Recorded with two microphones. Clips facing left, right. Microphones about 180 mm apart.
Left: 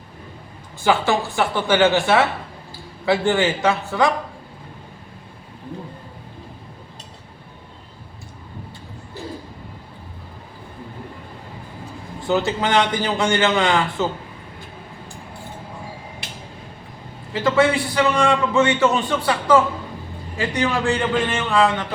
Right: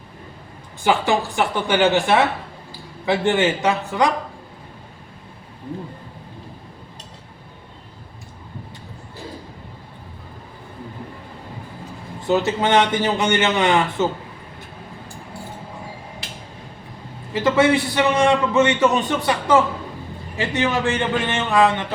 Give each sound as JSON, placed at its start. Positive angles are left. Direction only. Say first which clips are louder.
{"t": 0.9, "sound": "a woman's voice", "louder": "even", "side_deg": -15}
{"t": 12.3, "sound": "a man's voice", "louder": "right 2 dB", "side_deg": -20}
{"t": 17.4, "sound": "a man's voice", "louder": "right 1 dB", "side_deg": -20}